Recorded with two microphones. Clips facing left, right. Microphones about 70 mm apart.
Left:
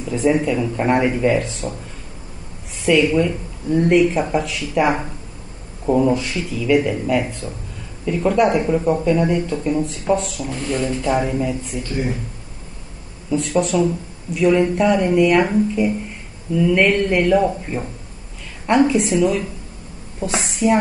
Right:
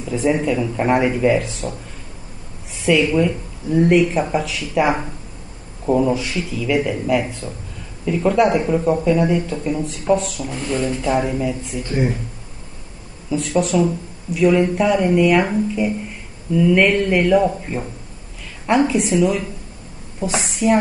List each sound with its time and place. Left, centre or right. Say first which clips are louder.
0.0 s speech: left 1 dB; centre
2.8 s speech: even; centre
11.8 s speech: right 5 dB; right
13.3 s a woman's voice: even; centre